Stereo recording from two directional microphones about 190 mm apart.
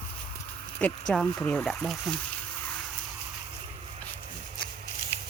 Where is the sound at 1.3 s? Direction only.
20° left (ahead or behind).